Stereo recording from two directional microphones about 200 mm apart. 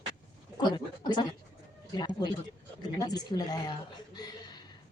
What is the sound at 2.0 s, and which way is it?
A woman's voice, 20° left (ahead or behind).